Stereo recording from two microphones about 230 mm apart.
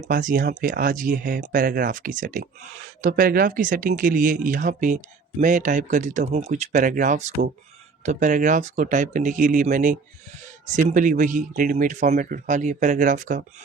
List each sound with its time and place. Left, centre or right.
0.0 s speech: right